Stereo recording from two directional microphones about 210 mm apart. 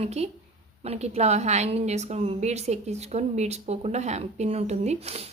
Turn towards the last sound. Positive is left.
turn(degrees=-30)  # may be behind; listen again after turning